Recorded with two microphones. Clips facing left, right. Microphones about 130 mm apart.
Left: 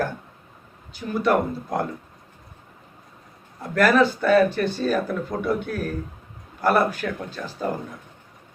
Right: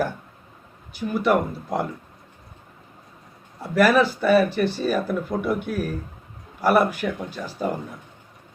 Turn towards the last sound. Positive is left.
turn(degrees=-10)  # may be behind; listen again after turning